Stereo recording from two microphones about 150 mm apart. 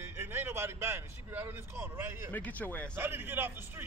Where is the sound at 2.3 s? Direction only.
10° left (ahead or behind).